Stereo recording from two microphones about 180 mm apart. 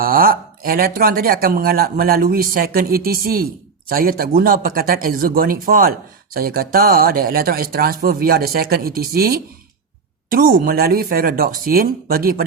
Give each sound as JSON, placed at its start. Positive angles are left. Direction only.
{"t": 0.0, "sound": "speech", "side_deg": -55}